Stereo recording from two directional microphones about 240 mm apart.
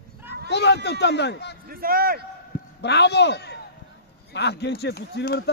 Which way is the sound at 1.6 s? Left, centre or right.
Right.